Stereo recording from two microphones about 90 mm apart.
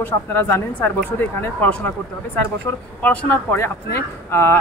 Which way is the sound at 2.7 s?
25° left (ahead or behind).